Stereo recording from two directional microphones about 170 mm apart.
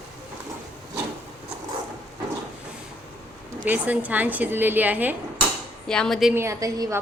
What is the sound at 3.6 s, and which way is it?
Speech, 10° right (ahead or behind).